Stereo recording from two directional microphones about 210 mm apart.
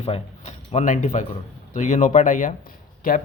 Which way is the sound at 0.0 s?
30° left (ahead or behind).